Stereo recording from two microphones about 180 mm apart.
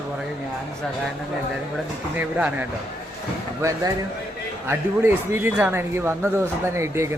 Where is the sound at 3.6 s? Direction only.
15° right (ahead or behind).